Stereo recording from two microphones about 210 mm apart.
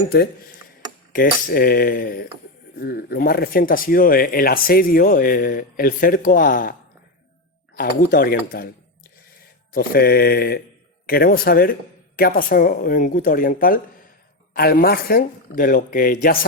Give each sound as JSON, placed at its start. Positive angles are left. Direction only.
{"t": 1.1, "sound": "speech", "side_deg": 45}
{"t": 7.8, "sound": "speech", "side_deg": 45}
{"t": 9.7, "sound": "speech", "side_deg": 45}